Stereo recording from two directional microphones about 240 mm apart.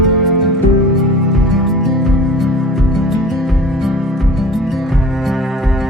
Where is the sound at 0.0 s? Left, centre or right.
Centre.